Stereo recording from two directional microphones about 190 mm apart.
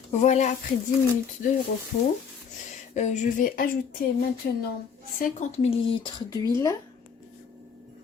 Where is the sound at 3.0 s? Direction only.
40° left (ahead or behind).